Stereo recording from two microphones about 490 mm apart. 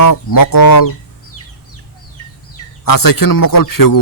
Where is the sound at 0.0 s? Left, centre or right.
Left.